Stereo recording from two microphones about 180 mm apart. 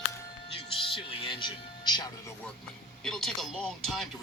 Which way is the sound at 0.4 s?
30° left (ahead or behind).